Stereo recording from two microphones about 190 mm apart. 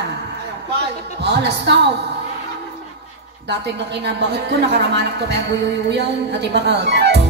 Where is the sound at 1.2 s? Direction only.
60° right (ahead or behind).